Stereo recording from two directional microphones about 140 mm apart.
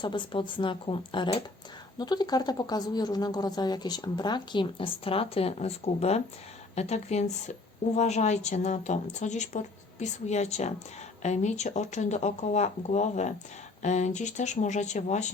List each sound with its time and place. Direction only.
0.0 s a woman's voice: 35° left (ahead or behind); by 15.3 s 55° left (ahead or behind)